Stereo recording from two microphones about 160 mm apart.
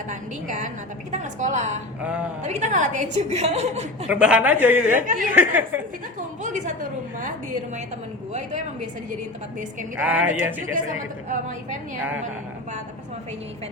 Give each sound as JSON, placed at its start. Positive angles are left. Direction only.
{"t": 0.1, "sound": "a woman's voice", "side_deg": -50}
{"t": 2.0, "sound": "speech", "side_deg": -10}
{"t": 2.4, "sound": "a woman's voice", "side_deg": -45}
{"t": 4.1, "sound": "a woman's voice", "side_deg": -5}
{"t": 6.1, "sound": "a woman's voice", "side_deg": -50}
{"t": 8.3, "sound": "a woman's voice", "side_deg": -50}
{"t": 10.0, "sound": "a woman's voice", "side_deg": -10}
{"t": 10.6, "sound": "a woman's voice", "side_deg": -55}